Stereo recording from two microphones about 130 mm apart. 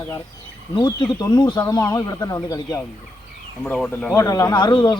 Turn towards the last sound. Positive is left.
turn(degrees=35)  # may be behind; listen again after turning